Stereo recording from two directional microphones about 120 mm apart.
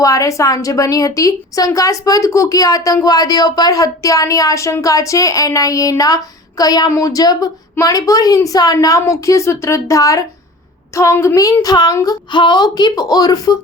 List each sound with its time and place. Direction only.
0.0 s a woman's voice: 30° left (ahead or behind)